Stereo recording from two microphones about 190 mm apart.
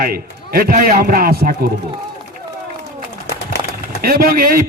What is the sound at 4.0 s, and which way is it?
Speech, 50° right (ahead or behind).